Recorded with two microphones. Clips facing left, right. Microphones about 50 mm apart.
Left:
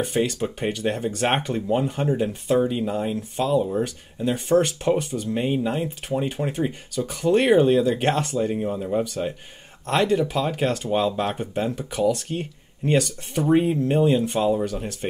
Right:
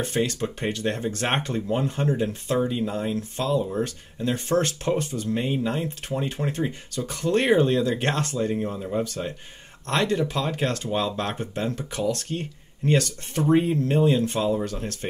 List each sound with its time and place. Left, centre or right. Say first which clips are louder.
0.0 s speech: left 2 dB; centre